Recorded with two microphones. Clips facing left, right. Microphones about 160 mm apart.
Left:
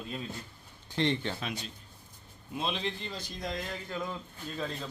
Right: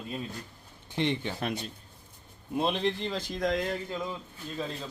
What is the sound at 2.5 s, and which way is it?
Speech, 55° right (ahead or behind).